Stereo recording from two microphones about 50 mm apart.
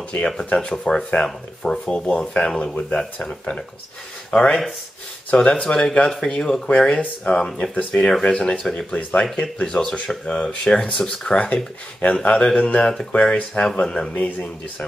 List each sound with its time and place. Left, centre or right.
0.1 s speech: left
0.6 s speech: centre
8.5 s speech: centre; by 13.7 s left
13.8 s speech: centre
14.1 s speech: left